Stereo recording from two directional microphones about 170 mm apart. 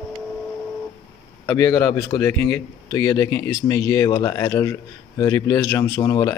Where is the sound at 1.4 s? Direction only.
20° left (ahead or behind).